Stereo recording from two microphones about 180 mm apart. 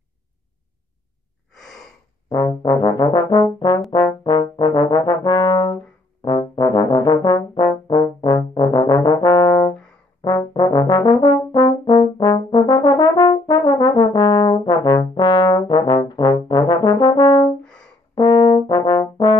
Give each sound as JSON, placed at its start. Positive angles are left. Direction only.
{"t": 2.2, "sound": "brass instrument", "side_deg": 20}
{"t": 6.2, "sound": "trombone", "side_deg": 25}
{"t": 10.2, "sound": "brass instrument", "side_deg": 20}